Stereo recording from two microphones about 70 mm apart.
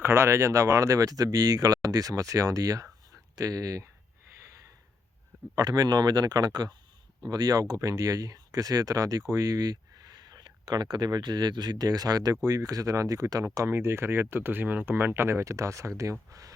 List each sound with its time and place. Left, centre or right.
0.0 s speech: right
3.1 s a sound: right
5.5 s speech: right
13.7 s speech: right